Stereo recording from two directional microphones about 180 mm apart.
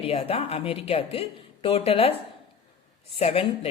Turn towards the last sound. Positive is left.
turn(degrees=30)  # may be behind; listen again after turning